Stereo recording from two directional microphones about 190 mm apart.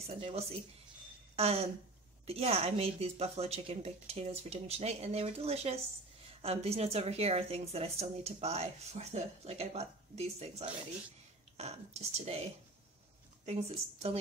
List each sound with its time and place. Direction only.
0.0 s a woman's voice: 30° right (ahead or behind)
13.5 s a woman's voice: 35° right (ahead or behind)